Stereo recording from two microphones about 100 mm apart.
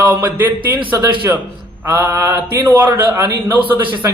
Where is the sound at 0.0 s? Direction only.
20° right (ahead or behind).